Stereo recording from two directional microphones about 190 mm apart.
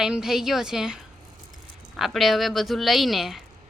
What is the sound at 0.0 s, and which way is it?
A woman's voice, 5° right (ahead or behind).